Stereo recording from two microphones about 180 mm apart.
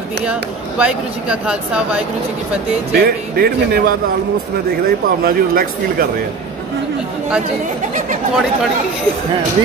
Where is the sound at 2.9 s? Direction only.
60° right (ahead or behind).